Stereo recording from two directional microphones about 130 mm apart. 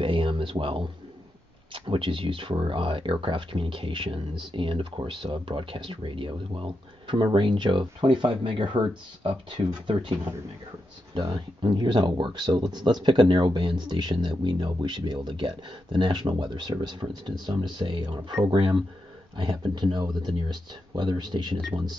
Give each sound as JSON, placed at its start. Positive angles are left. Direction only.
{"t": 0.0, "sound": "a sound", "side_deg": -45}
{"t": 1.7, "sound": "speech", "side_deg": -40}
{"t": 11.1, "sound": "speech", "side_deg": -40}